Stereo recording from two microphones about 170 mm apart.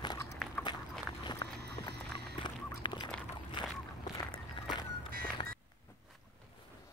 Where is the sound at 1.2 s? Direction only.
25° left (ahead or behind).